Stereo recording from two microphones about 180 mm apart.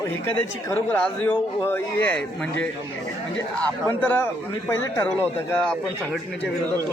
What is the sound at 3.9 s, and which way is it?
A man's voice, 10° left (ahead or behind).